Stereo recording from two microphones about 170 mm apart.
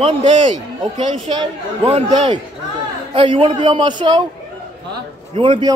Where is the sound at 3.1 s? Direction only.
30° right (ahead or behind).